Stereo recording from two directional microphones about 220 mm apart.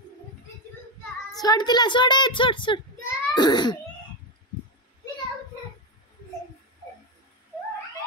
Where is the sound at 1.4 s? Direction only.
20° left (ahead or behind).